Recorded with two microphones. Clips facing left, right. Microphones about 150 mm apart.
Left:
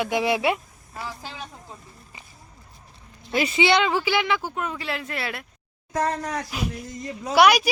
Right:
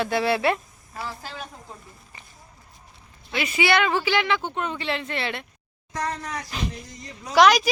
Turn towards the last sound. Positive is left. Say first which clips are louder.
# even
turn(degrees=10)  # may be behind; listen again after turning